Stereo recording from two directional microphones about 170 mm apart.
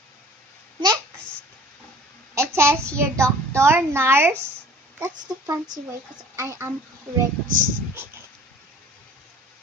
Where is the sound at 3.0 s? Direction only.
15° right (ahead or behind).